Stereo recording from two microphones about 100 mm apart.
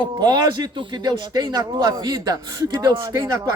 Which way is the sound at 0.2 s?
45° right (ahead or behind).